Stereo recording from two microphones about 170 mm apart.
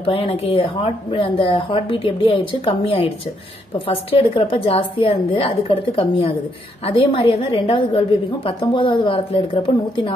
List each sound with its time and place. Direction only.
0.0 s a woman's voice: 30° left (ahead or behind)